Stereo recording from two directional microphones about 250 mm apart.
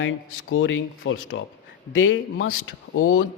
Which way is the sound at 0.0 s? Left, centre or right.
Left.